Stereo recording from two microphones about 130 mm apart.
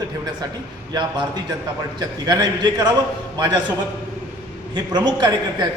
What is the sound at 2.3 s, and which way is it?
Speech, 30° right (ahead or behind).